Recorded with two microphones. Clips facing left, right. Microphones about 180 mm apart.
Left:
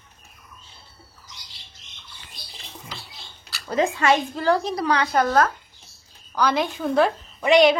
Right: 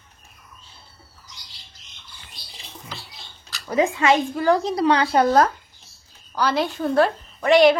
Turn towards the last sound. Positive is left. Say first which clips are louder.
# right 1 dB
turn(degrees=0)  # may be behind; listen again after turning